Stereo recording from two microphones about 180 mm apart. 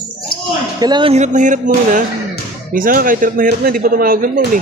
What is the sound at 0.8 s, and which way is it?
Speech, 25° right (ahead or behind).